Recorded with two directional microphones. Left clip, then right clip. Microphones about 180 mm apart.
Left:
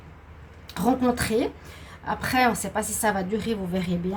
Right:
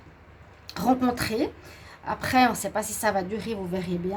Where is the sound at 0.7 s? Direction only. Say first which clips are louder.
Left 1 dB; 45° right (ahead or behind).